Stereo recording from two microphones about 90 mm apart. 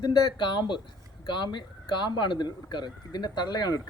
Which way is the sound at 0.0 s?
55° left (ahead or behind).